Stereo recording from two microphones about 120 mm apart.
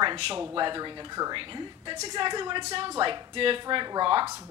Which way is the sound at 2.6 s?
50° right (ahead or behind).